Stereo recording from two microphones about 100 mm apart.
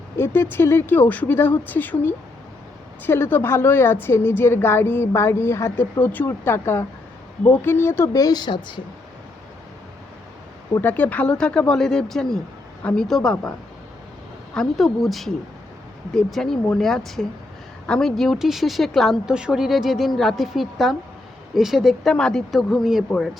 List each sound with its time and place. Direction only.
0.5 s a woman's voice: 25° left (ahead or behind); by 8.8 s 55° left (ahead or behind)
10.8 s speech: 15° left (ahead or behind)
14.5 s a woman's voice: 5° left (ahead or behind)